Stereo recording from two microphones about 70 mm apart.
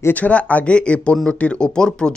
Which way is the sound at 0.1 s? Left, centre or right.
Left.